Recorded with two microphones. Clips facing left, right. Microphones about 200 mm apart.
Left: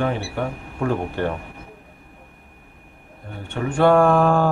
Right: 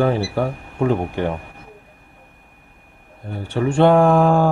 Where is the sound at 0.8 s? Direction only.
15° right (ahead or behind).